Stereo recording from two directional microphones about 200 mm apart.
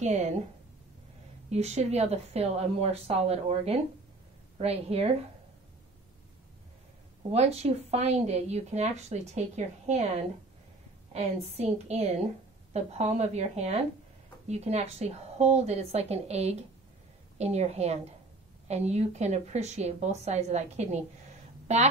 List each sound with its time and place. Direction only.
0.0 s a woman's voice: 35° right (ahead or behind)
1.5 s a woman's voice: 35° right (ahead or behind)
7.3 s a woman's voice: 30° right (ahead or behind)
11.1 s a woman's voice: 30° right (ahead or behind)